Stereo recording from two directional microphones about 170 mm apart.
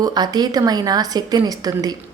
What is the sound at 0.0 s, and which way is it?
A woman's voice, 25° right (ahead or behind).